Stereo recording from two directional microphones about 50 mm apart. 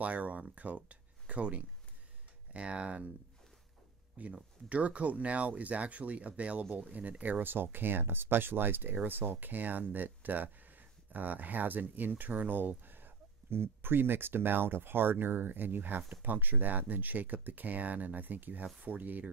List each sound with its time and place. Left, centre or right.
0.0 s speech: right
0.7 s a sound: right
2.5 s speech: right
4.2 s speech: right